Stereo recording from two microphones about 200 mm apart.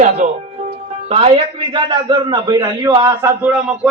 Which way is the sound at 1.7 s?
20° right (ahead or behind).